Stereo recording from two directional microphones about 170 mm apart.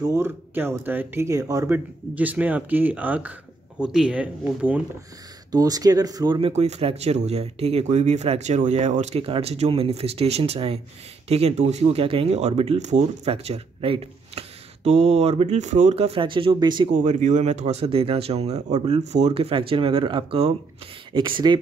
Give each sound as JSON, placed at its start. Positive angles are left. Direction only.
{"t": 0.0, "sound": "speech", "side_deg": -15}
{"t": 2.1, "sound": "speech", "side_deg": -10}
{"t": 5.5, "sound": "speech", "side_deg": -20}
{"t": 6.5, "sound": "speech", "side_deg": -40}
{"t": 16.9, "sound": "speech", "side_deg": -45}